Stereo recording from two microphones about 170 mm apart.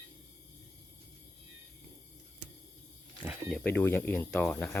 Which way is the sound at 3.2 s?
5° right (ahead or behind).